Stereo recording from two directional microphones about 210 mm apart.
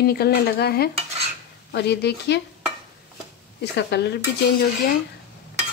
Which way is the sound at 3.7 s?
55° left (ahead or behind).